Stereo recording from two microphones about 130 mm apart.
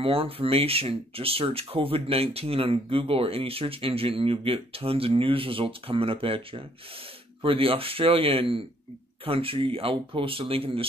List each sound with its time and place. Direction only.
0.0 s speech: 45° right (ahead or behind)